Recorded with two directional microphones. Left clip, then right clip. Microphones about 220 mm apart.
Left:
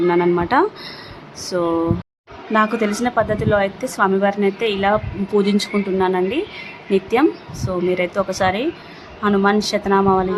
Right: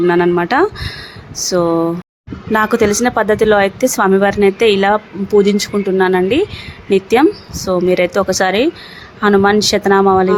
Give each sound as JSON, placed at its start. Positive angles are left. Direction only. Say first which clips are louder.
{"t": 0.1, "sound": "a woman's voice", "louder": "right 4 dB", "side_deg": -15}
{"t": 5.3, "sound": "a woman's voice", "louder": "right 6 dB", "side_deg": -10}